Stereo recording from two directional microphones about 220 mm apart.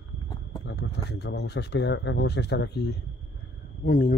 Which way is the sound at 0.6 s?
50° left (ahead or behind).